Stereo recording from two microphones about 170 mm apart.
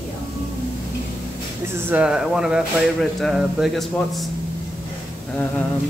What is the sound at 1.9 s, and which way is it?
Speech, 5° right (ahead or behind).